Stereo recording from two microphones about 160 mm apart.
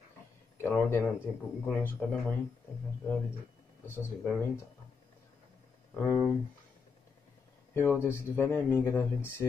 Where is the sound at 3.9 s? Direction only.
15° left (ahead or behind).